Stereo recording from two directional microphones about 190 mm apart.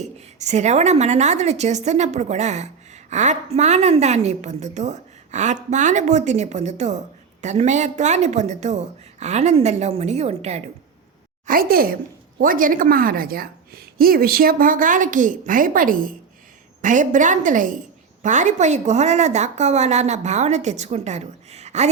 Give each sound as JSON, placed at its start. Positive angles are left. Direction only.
{"t": 0.0, "sound": "a woman's voice", "side_deg": -35}
{"t": 11.4, "sound": "a woman's voice", "side_deg": -50}